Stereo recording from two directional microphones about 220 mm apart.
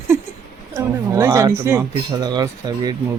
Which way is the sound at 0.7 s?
15° right (ahead or behind).